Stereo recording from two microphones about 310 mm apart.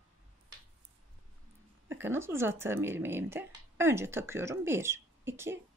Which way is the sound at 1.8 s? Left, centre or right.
Centre.